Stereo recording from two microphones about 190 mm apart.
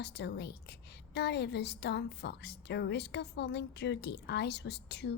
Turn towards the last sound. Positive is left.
turn(degrees=60)  # may be behind; listen again after turning